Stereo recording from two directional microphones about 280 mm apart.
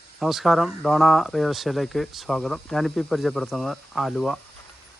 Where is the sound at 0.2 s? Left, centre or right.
Centre.